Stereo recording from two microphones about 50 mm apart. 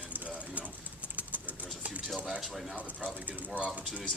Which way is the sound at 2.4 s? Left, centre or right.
Centre.